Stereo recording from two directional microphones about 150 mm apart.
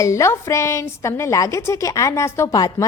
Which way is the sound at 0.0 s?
20° left (ahead or behind).